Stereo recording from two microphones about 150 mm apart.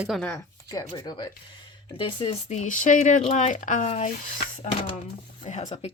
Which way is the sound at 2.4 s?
55° left (ahead or behind).